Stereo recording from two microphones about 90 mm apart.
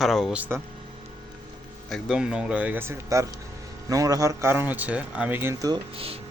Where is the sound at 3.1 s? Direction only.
35° right (ahead or behind); by 5.4 s 10° right (ahead or behind).